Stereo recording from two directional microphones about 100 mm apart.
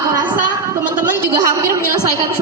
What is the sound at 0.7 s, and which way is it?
Speech, 30° right (ahead or behind).